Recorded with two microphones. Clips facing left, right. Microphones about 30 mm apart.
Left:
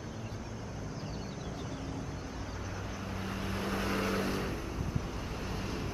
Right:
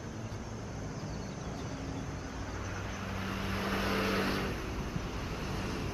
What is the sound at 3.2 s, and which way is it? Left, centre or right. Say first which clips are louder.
Vehicle: right 1 dB; centre.